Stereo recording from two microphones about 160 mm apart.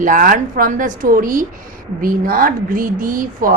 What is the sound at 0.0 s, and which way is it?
Speech, 55° right (ahead or behind).